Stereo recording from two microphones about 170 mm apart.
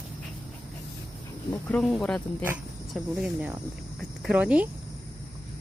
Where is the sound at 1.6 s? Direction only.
5° left (ahead or behind).